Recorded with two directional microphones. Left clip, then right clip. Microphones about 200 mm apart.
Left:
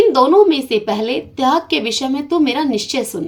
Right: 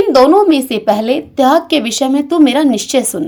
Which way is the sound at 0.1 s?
45° right (ahead or behind).